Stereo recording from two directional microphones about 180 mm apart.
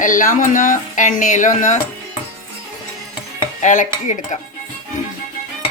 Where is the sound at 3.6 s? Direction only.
45° left (ahead or behind).